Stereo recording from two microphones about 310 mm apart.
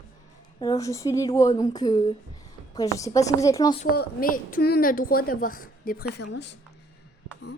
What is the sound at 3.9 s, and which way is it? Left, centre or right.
A woman's voice, left.